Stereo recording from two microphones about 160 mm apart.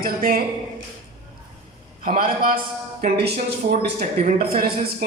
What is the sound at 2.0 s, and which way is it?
Speech, 60° right (ahead or behind).